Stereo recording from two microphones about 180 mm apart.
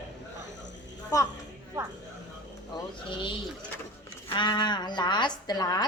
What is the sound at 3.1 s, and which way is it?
Speech, 25° left (ahead or behind).